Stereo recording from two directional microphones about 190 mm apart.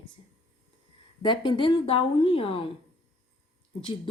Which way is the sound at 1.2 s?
25° left (ahead or behind).